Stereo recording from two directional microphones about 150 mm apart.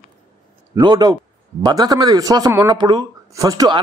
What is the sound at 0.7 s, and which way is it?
A man's voice, 30° right (ahead or behind).